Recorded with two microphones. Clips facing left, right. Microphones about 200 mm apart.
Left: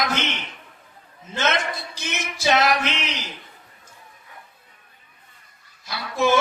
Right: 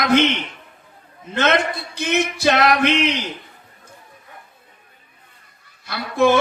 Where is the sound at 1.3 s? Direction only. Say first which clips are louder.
Right 5 dB; 60° right (ahead or behind).